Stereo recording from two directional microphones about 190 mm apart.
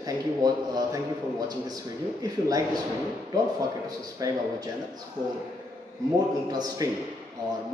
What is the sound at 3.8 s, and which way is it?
Speech, 20° right (ahead or behind).